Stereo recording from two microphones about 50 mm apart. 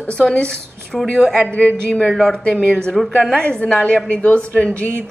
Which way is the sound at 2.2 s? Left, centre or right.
Centre.